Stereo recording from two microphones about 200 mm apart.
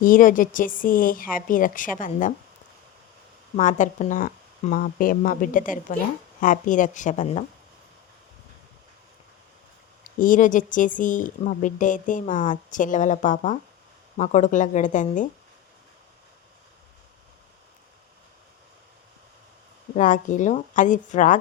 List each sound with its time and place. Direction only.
0.0 s a woman's voice: 40° left (ahead or behind)
3.5 s speech: 40° left (ahead or behind)
10.0 s speech: 40° left (ahead or behind)
20.0 s speech: 40° left (ahead or behind)